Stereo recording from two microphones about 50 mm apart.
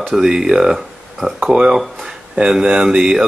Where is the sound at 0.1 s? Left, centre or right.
Centre.